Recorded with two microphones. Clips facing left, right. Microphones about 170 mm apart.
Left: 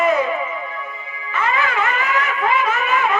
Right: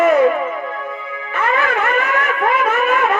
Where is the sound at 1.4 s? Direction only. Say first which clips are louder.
Right 3 dB; 55° right (ahead or behind).